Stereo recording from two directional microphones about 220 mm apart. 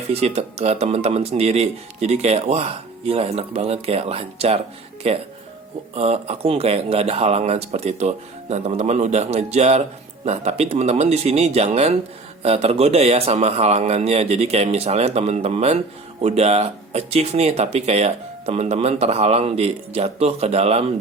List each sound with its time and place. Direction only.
0.1 s speech: 25° right (ahead or behind)